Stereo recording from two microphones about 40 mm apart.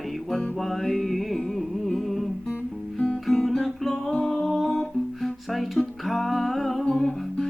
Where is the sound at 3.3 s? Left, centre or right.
Centre.